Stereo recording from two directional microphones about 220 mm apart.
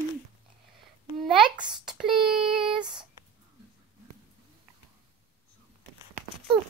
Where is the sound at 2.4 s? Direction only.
5° right (ahead or behind).